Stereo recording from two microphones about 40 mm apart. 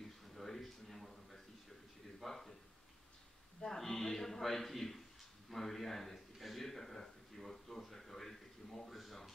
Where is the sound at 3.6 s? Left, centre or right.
Centre.